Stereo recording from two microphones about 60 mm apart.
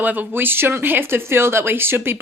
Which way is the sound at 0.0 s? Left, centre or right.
Right.